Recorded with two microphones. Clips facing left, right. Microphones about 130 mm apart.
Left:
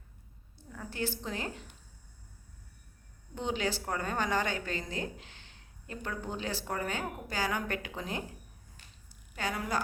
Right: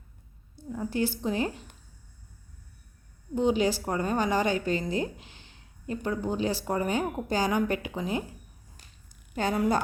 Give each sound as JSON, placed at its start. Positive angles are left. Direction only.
{"t": 0.7, "sound": "a woman's voice", "side_deg": -20}
{"t": 3.3, "sound": "a woman's voice", "side_deg": -15}
{"t": 9.3, "sound": "a woman's voice", "side_deg": -25}